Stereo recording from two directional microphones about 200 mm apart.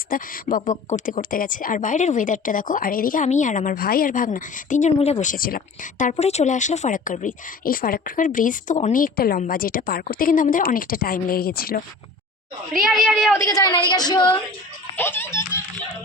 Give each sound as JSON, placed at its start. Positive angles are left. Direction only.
{"t": 0.1, "sound": "speech", "side_deg": 45}
{"t": 12.8, "sound": "a woman's voice", "side_deg": 0}
{"t": 13.3, "sound": "a woman's voice", "side_deg": 15}
{"t": 14.9, "sound": "speech", "side_deg": 10}